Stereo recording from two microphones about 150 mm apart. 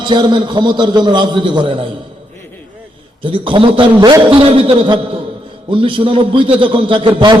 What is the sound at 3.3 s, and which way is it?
A man's voice, 35° right (ahead or behind).